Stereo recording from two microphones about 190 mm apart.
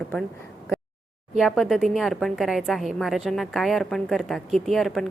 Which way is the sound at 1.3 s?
Centre (ahead or behind).